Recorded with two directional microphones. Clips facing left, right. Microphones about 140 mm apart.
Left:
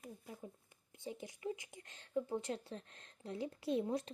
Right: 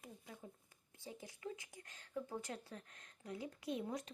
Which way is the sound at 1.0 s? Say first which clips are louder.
Left 6 dB; 20° left (ahead or behind).